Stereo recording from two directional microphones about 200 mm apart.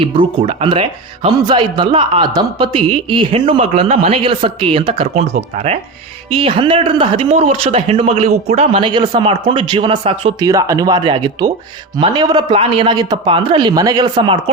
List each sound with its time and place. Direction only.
0.0 s speech: 25° right (ahead or behind)
10.5 s speech: 15° right (ahead or behind)